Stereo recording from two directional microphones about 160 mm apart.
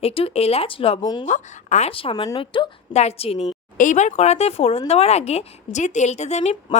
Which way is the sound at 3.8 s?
50° left (ahead or behind).